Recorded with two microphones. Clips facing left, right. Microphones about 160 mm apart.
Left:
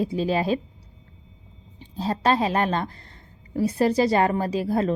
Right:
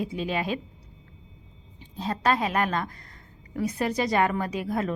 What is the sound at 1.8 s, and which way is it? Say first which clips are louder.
A woman's voice: left 4 dB; 30° left (ahead or behind).